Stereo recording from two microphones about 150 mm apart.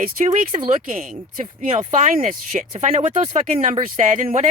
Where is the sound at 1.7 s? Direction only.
45° right (ahead or behind).